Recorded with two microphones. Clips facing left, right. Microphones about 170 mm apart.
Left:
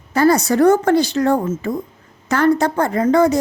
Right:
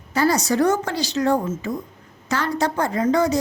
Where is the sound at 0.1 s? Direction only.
55° left (ahead or behind).